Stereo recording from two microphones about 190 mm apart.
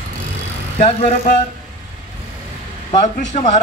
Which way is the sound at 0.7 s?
30° left (ahead or behind).